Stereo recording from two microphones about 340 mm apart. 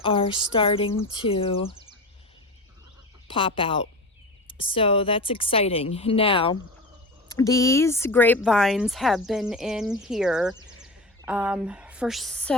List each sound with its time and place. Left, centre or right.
0.0 s a woman's voice: centre
3.2 s a woman's voice: centre